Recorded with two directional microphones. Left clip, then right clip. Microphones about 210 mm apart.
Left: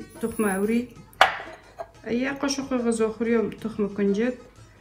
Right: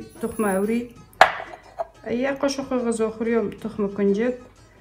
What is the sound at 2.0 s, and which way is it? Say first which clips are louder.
Speech: right 3 dB; 10° right (ahead or behind).